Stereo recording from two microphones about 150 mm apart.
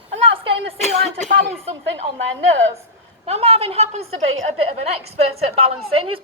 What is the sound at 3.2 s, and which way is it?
A woman's voice, 45° right (ahead or behind).